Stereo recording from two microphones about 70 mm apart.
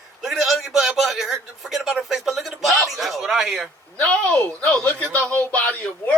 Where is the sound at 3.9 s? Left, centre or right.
Centre.